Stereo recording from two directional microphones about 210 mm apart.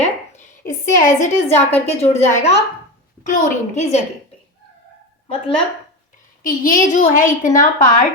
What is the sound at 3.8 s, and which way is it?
Speech, 30° left (ahead or behind).